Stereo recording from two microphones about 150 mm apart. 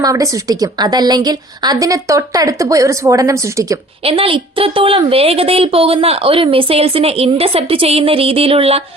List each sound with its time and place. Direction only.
0.0 s a woman's voice: 25° right (ahead or behind)
4.0 s a woman's voice: 40° right (ahead or behind)